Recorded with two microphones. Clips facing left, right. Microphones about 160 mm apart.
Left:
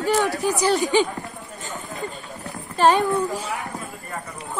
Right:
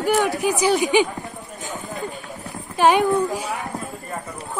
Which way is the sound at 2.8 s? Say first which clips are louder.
Right 1 dB; 15° right (ahead or behind).